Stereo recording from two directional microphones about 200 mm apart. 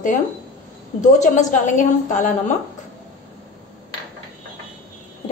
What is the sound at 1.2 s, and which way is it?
A woman's voice, 40° left (ahead or behind).